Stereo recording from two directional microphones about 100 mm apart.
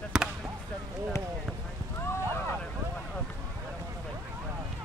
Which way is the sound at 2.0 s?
25° left (ahead or behind).